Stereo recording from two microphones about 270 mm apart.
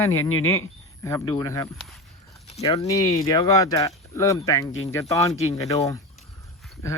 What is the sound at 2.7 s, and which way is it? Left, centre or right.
Speech, centre.